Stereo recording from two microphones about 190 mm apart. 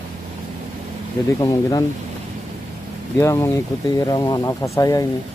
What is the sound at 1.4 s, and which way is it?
Speech, 20° left (ahead or behind).